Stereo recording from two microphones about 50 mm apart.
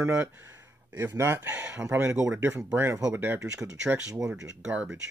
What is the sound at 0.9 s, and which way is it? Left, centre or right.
Speech, right.